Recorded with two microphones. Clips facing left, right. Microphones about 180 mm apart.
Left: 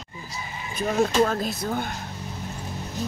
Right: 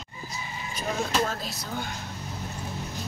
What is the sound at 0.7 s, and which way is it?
Speech, 55° left (ahead or behind).